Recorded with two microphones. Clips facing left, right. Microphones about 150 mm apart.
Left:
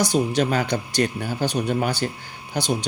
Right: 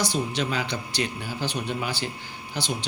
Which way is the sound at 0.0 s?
45° left (ahead or behind).